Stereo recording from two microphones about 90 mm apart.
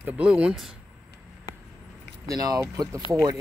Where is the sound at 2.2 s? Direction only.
40° right (ahead or behind).